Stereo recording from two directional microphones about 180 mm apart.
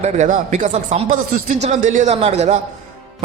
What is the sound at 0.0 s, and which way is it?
A man's voice, 40° right (ahead or behind).